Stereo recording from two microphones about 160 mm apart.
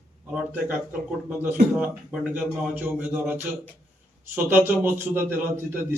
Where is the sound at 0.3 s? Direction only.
10° right (ahead or behind).